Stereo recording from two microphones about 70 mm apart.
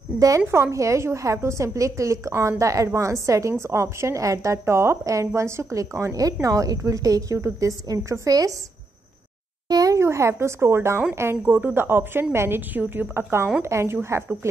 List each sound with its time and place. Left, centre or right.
0.5 s a woman's voice: right
9.7 s a sound: right
9.9 s a woman's voice: right